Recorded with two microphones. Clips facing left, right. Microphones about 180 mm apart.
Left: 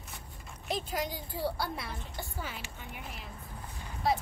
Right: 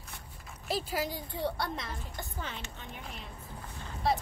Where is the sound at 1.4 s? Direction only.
5° left (ahead or behind).